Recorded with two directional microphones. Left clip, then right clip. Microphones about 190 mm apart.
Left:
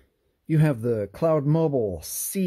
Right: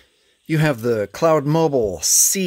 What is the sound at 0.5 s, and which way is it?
Speech, 10° right (ahead or behind).